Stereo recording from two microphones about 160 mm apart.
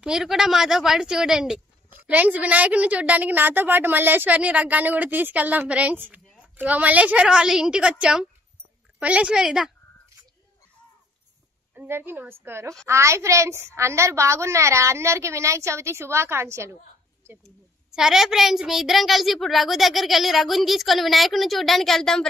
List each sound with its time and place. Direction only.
0.0 s a child's voice: 5° right (ahead or behind)
11.7 s speech: 10° right (ahead or behind)
17.9 s a child's voice: centre (ahead or behind)